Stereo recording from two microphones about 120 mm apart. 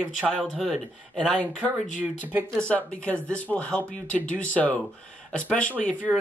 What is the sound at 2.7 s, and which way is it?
Speech, 10° left (ahead or behind).